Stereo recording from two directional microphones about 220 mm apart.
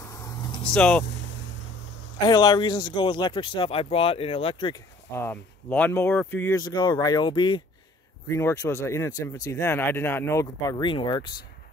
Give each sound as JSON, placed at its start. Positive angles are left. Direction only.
{"t": 0.7, "sound": "speech", "side_deg": 5}
{"t": 2.2, "sound": "speech", "side_deg": 20}